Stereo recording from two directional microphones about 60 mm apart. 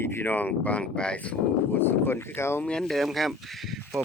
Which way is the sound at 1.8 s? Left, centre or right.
Left.